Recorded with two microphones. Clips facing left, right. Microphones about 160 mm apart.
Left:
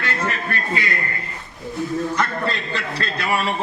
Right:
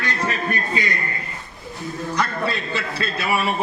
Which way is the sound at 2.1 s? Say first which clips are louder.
Even; 5° right (ahead or behind).